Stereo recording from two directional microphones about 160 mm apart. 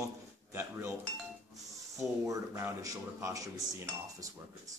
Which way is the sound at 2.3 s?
20° right (ahead or behind).